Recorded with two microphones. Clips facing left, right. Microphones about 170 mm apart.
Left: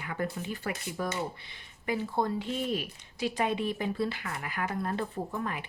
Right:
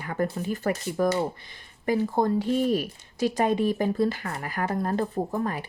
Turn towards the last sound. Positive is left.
turn(degrees=-40)  # may be behind; listen again after turning